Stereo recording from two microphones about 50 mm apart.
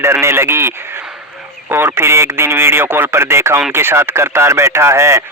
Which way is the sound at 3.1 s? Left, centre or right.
Right.